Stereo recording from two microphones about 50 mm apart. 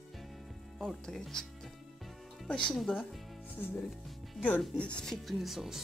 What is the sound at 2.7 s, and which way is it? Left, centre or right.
Speech, centre.